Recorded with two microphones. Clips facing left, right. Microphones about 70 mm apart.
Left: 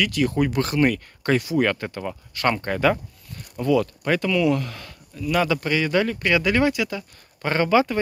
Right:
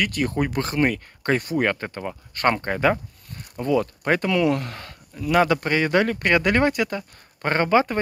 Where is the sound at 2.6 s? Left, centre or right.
Right.